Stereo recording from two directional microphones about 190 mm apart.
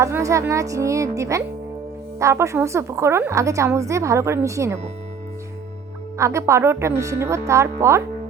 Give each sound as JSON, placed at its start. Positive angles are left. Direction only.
{"t": 0.0, "sound": "a woman's voice", "side_deg": -15}
{"t": 6.1, "sound": "a woman's voice", "side_deg": -15}